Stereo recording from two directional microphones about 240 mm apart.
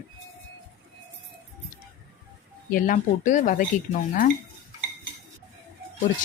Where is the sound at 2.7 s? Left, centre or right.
Left.